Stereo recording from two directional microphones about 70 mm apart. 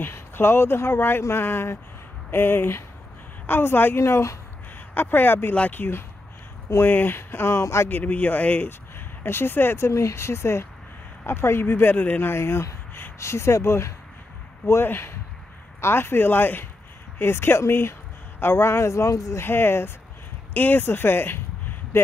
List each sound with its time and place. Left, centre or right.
0.0 s speech: left
4.0 s speech: left
4.9 s speech: left
7.9 s speech: left